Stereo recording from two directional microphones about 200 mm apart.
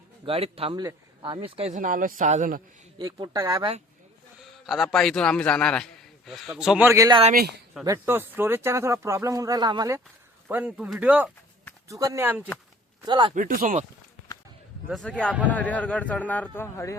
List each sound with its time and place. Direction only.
0.3 s a man's voice: 30° right (ahead or behind)
3.0 s speech: 20° right (ahead or behind)
4.6 s a man's voice: centre (ahead or behind); by 10.0 s 20° right (ahead or behind)
10.5 s speech: 5° right (ahead or behind)
13.1 s a man's voice: 25° right (ahead or behind)
13.3 s speech: 45° right (ahead or behind)
14.8 s a man's voice: centre (ahead or behind); by 17.0 s 15° left (ahead or behind)